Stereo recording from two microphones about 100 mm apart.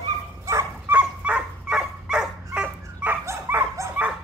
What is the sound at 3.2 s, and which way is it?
Dog, 25° right (ahead or behind).